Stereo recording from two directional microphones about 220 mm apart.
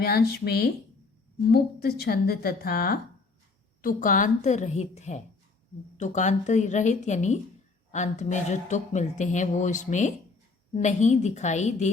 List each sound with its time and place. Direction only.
0.0 s speech: 45° left (ahead or behind)